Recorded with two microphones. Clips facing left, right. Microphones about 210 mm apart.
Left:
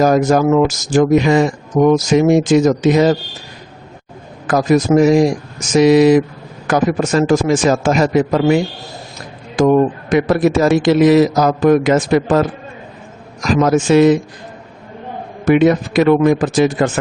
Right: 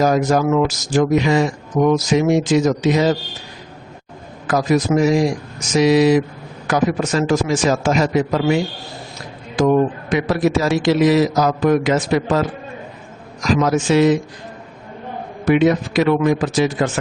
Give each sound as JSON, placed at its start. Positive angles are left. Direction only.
{"t": 0.0, "sound": "speech", "side_deg": 50}
{"t": 4.4, "sound": "a man's voice", "side_deg": 50}
{"t": 9.6, "sound": "speech", "side_deg": 50}
{"t": 15.4, "sound": "speech", "side_deg": 50}